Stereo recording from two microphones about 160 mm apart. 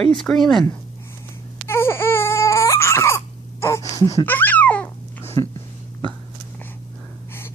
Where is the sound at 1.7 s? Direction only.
15° left (ahead or behind).